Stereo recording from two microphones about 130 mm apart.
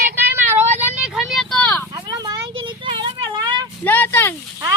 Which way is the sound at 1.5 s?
10° left (ahead or behind).